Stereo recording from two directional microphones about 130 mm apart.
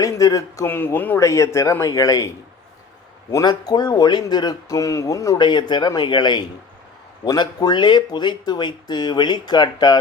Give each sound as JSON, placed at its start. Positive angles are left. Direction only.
{"t": 0.0, "sound": "speech", "side_deg": 25}
{"t": 3.3, "sound": "speech", "side_deg": 30}